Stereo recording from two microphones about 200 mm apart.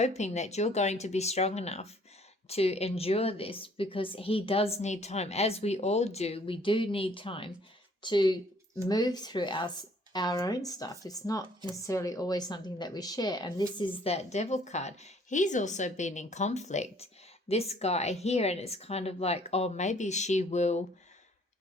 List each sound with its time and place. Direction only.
0.0 s a woman's voice: 35° left (ahead or behind)